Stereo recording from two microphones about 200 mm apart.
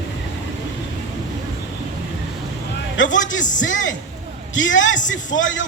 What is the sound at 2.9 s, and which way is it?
A man's voice, 70° left (ahead or behind).